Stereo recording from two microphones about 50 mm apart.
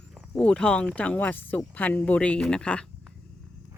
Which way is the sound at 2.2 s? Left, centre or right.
Centre.